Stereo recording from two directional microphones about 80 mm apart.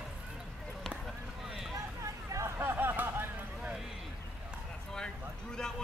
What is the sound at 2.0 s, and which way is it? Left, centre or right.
Hubbub, right.